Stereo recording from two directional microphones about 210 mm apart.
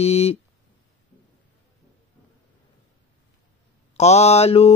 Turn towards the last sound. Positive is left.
turn(degrees=30)  # may be behind; listen again after turning